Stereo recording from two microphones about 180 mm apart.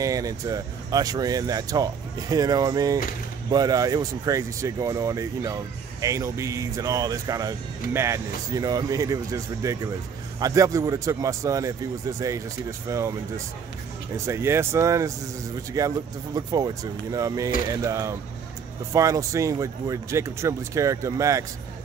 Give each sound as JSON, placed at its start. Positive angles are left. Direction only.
{"t": 0.0, "sound": "speech", "side_deg": -20}
{"t": 14.1, "sound": "speech", "side_deg": -15}